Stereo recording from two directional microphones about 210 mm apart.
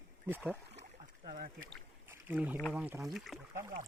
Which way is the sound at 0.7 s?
30° right (ahead or behind).